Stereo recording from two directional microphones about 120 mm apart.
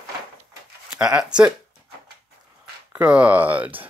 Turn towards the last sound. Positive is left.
turn(degrees=-15)  # may be behind; listen again after turning